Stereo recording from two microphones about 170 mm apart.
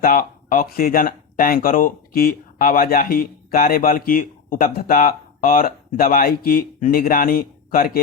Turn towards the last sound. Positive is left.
turn(degrees=60)  # may be behind; listen again after turning